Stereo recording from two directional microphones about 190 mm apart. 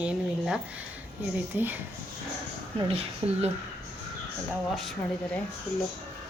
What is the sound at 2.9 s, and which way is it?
Speech, 30° right (ahead or behind).